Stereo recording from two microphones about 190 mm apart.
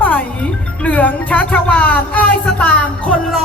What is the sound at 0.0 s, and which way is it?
Music, 10° left (ahead or behind).